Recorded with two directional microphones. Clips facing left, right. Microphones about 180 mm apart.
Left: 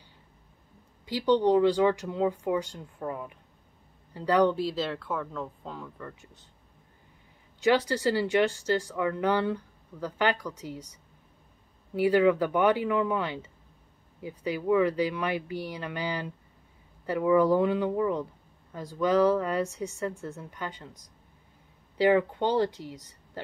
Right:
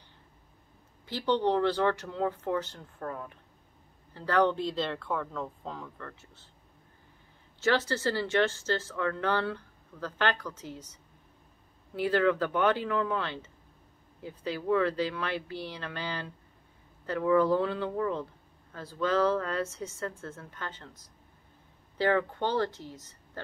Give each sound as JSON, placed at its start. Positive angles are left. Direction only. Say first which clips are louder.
{"t": 1.0, "sound": "speech", "louder": "left 4 dB", "side_deg": 15}
{"t": 7.6, "sound": "speech", "louder": "left 4 dB", "side_deg": 15}